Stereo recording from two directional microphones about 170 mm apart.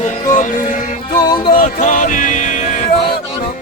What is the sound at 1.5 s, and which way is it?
Music, 45° left (ahead or behind).